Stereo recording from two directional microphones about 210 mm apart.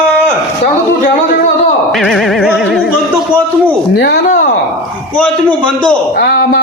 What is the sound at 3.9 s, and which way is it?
Speech, 55° left (ahead or behind).